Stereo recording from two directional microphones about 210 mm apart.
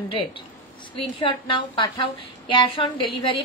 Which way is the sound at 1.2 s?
25° left (ahead or behind).